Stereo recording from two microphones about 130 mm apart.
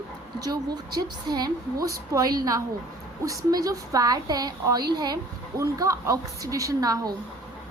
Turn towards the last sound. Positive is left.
turn(degrees=-30)  # may be behind; listen again after turning